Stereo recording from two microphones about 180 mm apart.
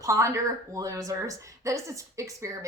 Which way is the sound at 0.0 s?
15° right (ahead or behind).